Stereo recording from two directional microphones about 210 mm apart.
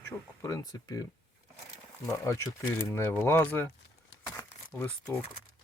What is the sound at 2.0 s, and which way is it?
Speech, 15° left (ahead or behind).